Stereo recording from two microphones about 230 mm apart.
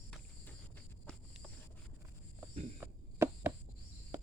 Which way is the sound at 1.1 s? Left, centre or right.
Centre.